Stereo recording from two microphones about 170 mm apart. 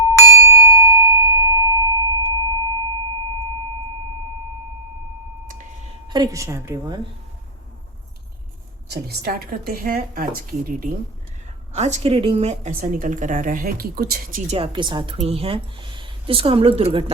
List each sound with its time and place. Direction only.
0.3 s bell: 15° right (ahead or behind)
5.5 s a sound: 50° right (ahead or behind)
6.1 s speech: 20° right (ahead or behind)
8.9 s a woman's voice: 65° right (ahead or behind)
11.7 s a woman's voice: 40° right (ahead or behind)
14.5 s speech: 30° right (ahead or behind)